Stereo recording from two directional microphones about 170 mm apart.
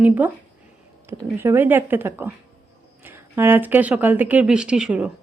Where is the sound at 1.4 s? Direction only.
15° right (ahead or behind).